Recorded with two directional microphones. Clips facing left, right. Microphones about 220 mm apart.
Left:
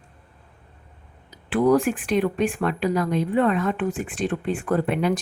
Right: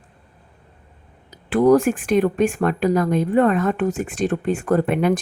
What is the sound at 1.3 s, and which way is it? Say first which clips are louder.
Speech: right 4 dB; 40° right (ahead or behind).